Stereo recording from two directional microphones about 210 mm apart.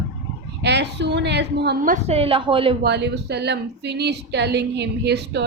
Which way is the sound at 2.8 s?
55° right (ahead or behind).